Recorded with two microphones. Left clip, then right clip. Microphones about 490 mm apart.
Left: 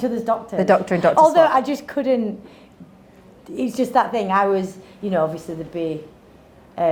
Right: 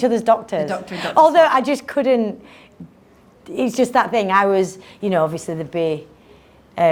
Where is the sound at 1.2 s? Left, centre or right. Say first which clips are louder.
Right 3 dB; right.